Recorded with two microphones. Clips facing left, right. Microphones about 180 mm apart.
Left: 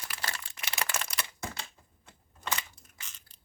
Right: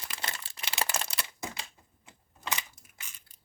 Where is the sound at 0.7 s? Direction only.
30° right (ahead or behind).